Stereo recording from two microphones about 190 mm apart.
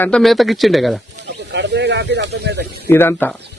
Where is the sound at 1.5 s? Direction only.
65° right (ahead or behind).